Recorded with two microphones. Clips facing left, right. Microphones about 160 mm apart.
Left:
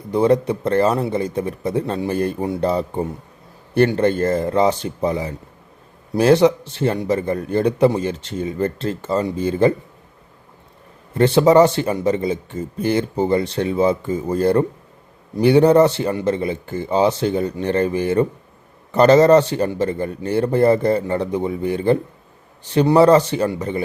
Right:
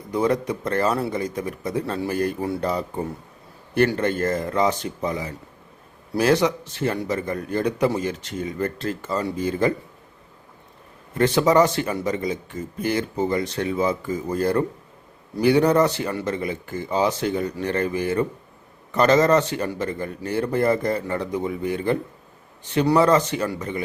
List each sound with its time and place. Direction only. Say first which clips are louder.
0.1 s a man's voice: left 6 dB; 30° left (ahead or behind)
11.2 s a man's voice: left 5 dB; 30° left (ahead or behind)